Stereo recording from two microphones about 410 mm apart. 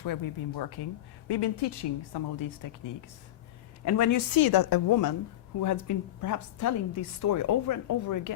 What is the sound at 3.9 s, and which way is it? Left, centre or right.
Speech, left.